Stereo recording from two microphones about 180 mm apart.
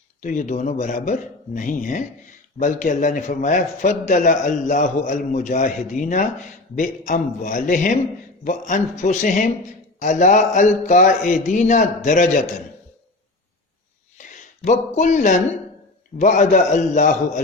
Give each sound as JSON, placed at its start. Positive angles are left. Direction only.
{"t": 0.2, "sound": "a man's voice", "side_deg": 45}
{"t": 14.2, "sound": "a man's voice", "side_deg": 45}